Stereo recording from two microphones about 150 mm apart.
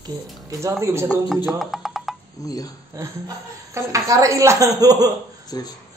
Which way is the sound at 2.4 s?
25° left (ahead or behind).